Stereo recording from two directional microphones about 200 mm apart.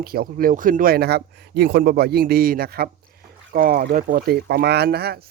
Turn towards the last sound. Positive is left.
turn(degrees=-50)  # may be behind; listen again after turning